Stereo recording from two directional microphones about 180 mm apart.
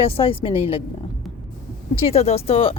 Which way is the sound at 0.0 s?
30° left (ahead or behind).